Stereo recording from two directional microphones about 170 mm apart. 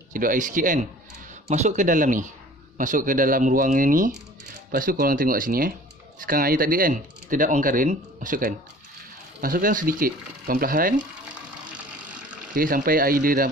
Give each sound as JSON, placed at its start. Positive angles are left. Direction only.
{"t": 0.1, "sound": "speech", "side_deg": -50}
{"t": 12.1, "sound": "speech", "side_deg": -55}